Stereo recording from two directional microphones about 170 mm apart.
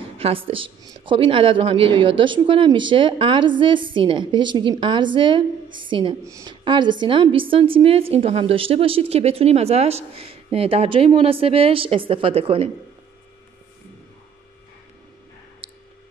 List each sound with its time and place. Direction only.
0.2 s a woman's voice: 30° right (ahead or behind)